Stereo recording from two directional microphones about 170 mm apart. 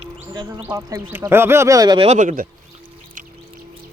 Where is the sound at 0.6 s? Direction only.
15° right (ahead or behind).